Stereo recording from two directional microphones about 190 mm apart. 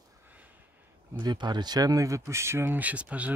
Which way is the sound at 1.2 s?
25° right (ahead or behind).